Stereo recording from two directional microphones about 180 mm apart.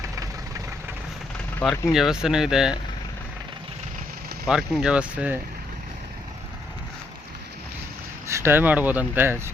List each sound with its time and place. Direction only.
0.0 s vehicle: 20° right (ahead or behind)
1.9 s speech: 5° right (ahead or behind)
4.4 s speech: 5° right (ahead or behind)
8.3 s speech: 15° right (ahead or behind)